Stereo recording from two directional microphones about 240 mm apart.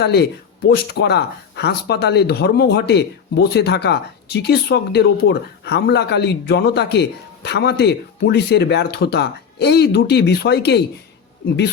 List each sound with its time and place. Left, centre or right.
0.0 s speech: left